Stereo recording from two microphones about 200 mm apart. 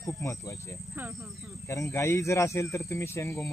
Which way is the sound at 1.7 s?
15° left (ahead or behind).